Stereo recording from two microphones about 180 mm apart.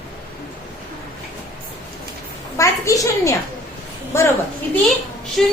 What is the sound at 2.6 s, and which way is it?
A woman's voice, 20° left (ahead or behind).